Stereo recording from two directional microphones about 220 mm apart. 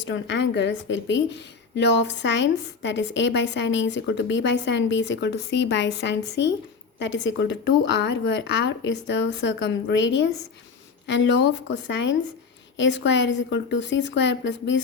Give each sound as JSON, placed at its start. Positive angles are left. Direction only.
{"t": 0.1, "sound": "a woman's voice", "side_deg": 55}